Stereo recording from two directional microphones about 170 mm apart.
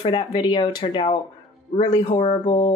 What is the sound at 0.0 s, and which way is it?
Speech, 25° left (ahead or behind).